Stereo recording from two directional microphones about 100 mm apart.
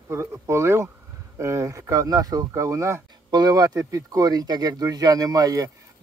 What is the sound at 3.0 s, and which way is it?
Speech, 45° right (ahead or behind).